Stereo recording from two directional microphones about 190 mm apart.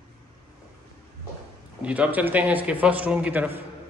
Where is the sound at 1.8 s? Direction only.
5° right (ahead or behind).